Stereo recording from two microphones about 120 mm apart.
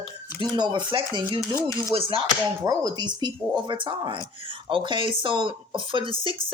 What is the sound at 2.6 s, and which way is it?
Speech, 30° right (ahead or behind).